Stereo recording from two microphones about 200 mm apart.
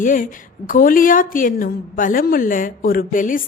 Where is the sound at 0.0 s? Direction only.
40° left (ahead or behind).